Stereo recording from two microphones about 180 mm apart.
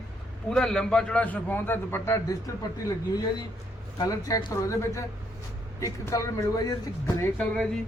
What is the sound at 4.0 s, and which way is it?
A man's voice, 20° left (ahead or behind).